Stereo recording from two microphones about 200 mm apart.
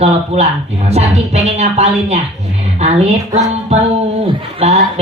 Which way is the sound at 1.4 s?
35° right (ahead or behind).